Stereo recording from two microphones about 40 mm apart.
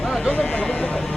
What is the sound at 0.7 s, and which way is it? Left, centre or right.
Vehicle, left.